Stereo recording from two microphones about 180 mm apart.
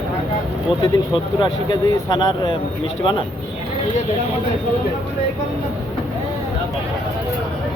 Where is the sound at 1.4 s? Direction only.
25° left (ahead or behind).